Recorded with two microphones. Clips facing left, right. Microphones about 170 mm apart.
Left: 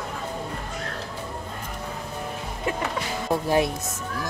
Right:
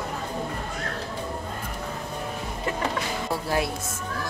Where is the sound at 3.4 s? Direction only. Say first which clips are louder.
Left 5 dB; 20° left (ahead or behind).